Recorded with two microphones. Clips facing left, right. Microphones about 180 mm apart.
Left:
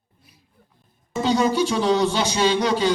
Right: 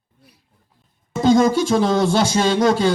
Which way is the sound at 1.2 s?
45° right (ahead or behind).